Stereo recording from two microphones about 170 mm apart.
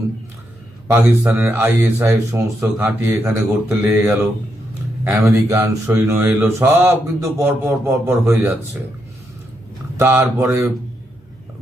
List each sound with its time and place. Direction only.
0.9 s speech: 15° right (ahead or behind)
10.0 s speech: 15° right (ahead or behind)